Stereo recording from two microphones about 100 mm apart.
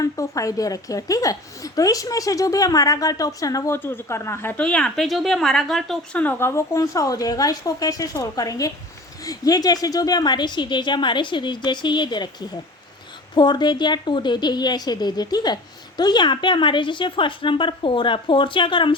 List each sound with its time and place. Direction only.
0.0 s a woman's voice: 35° left (ahead or behind)
3.8 s speech: 20° left (ahead or behind)
4.5 s speech: 10° left (ahead or behind)
5.0 s a woman's voice: centre (ahead or behind)
6.1 s a woman's voice: 20° left (ahead or behind); by 18.9 s 55° left (ahead or behind)